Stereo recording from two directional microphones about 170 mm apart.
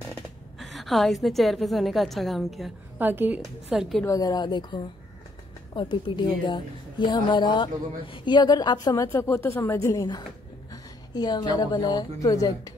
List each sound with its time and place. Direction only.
0.1 s speech: centre (ahead or behind)
3.0 s a woman's voice: 10° right (ahead or behind)
4.0 s a woman's voice: 20° left (ahead or behind)